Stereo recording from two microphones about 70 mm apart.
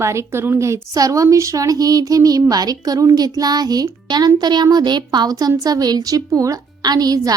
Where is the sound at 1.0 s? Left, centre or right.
Right.